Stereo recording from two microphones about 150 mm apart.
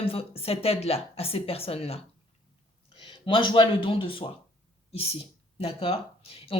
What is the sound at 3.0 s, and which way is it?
A woman's voice, 35° left (ahead or behind).